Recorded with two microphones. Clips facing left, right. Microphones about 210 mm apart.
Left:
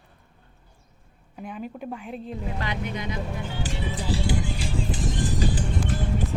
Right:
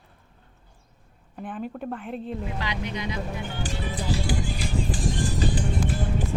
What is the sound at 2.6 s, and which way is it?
Speech, 50° left (ahead or behind).